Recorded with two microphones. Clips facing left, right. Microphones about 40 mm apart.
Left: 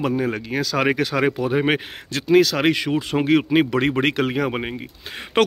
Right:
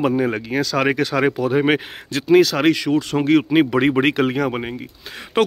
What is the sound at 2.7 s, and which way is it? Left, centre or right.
Speech, left.